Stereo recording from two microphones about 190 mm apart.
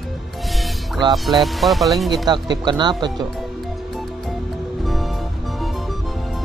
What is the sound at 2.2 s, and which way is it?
Speech, 20° right (ahead or behind).